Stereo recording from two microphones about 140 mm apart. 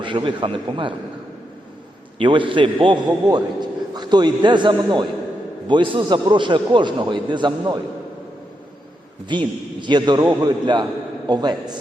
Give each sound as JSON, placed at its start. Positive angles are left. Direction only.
{"t": 0.0, "sound": "a man's voice", "side_deg": -35}
{"t": 2.1, "sound": "a man's voice", "side_deg": -35}
{"t": 9.3, "sound": "a man's voice", "side_deg": -35}